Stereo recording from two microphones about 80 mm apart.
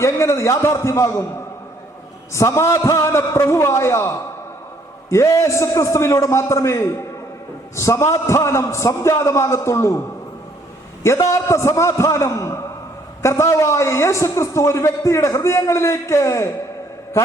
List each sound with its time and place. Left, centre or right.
0.0 s a man's voice: left
2.3 s a man's voice: left
11.0 s a man's voice: left